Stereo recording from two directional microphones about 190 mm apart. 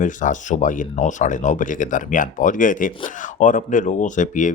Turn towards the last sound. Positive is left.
turn(degrees=40)  # may be behind; listen again after turning